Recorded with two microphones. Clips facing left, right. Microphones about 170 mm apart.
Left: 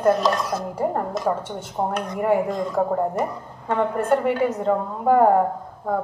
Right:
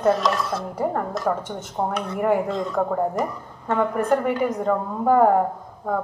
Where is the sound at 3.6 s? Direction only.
15° left (ahead or behind).